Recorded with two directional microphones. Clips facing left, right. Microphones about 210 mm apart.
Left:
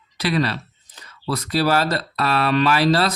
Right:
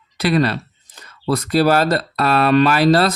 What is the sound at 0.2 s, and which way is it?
Speech, 50° right (ahead or behind).